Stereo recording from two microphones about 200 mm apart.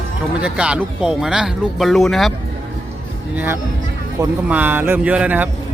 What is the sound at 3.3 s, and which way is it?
Speech, 10° right (ahead or behind).